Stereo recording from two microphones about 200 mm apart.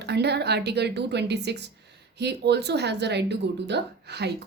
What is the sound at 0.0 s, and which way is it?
A woman's voice, 55° right (ahead or behind).